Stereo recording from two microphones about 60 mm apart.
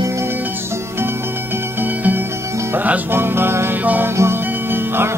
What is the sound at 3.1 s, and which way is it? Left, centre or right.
Music, right.